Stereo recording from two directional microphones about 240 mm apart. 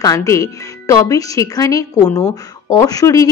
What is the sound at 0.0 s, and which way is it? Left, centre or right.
A woman's voice, centre.